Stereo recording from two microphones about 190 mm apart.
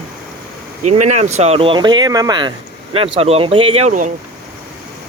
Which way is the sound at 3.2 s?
30° right (ahead or behind).